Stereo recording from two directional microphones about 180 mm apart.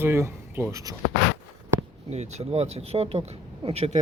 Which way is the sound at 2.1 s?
40° right (ahead or behind).